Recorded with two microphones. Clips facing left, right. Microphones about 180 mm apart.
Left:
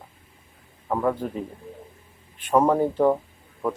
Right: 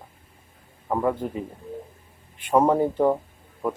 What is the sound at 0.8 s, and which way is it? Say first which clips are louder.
Speech: even; 10° right (ahead or behind).